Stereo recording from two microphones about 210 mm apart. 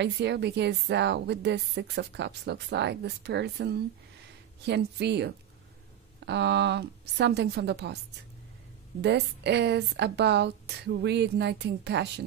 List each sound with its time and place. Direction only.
0.0 s a woman's voice: 55° right (ahead or behind)
9.0 s a woman's voice: 55° right (ahead or behind)